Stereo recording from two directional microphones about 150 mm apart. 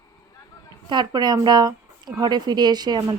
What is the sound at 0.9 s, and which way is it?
Speech, 30° right (ahead or behind).